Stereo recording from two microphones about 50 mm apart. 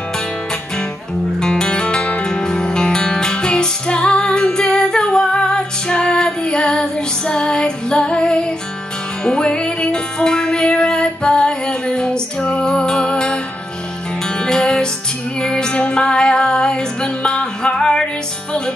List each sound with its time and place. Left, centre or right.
1.4 s music: centre